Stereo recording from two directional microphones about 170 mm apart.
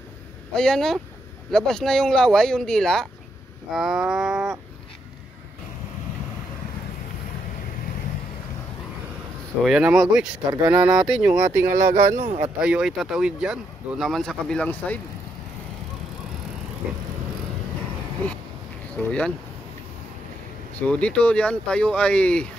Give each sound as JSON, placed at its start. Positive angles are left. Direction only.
{"t": 0.5, "sound": "speech", "side_deg": 5}
{"t": 9.6, "sound": "speech", "side_deg": -5}
{"t": 11.7, "sound": "speech", "side_deg": -55}
{"t": 12.4, "sound": "speech", "side_deg": -5}
{"t": 18.9, "sound": "speech", "side_deg": 5}
{"t": 20.8, "sound": "speech", "side_deg": 5}